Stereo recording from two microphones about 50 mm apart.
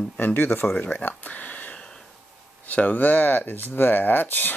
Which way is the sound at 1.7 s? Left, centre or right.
Centre.